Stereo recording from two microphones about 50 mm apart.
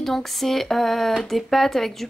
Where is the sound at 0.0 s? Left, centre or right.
Centre.